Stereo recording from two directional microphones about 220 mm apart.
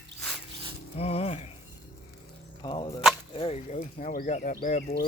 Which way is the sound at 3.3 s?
25° left (ahead or behind).